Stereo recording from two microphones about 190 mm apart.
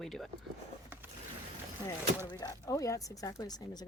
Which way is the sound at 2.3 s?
20° left (ahead or behind).